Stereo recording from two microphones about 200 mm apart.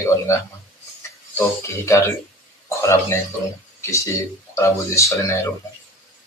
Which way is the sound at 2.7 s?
15° left (ahead or behind).